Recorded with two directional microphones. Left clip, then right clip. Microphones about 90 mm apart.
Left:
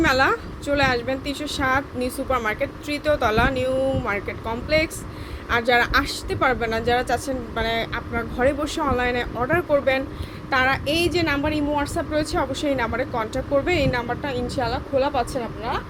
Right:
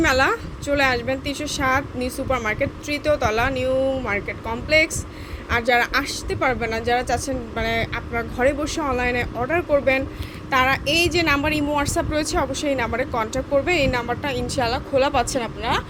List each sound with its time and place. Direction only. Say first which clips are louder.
0.0 s speech: even; 15° right (ahead or behind)
11.3 s a woman's voice: right 2 dB; 35° right (ahead or behind)
14.9 s a woman's voice: right 2 dB; 45° right (ahead or behind)